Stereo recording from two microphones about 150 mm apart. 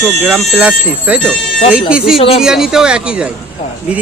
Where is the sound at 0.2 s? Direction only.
10° right (ahead or behind).